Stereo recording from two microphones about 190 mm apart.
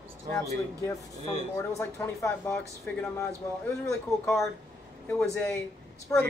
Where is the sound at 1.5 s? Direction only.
15° left (ahead or behind).